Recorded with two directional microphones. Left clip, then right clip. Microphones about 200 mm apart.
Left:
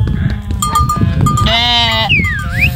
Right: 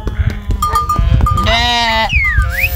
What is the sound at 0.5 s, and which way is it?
Sheep, 65° right (ahead or behind).